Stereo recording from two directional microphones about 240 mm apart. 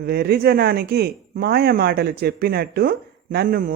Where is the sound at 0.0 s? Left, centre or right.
Right.